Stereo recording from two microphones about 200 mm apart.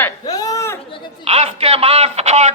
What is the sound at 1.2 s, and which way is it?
Speech, 30° right (ahead or behind).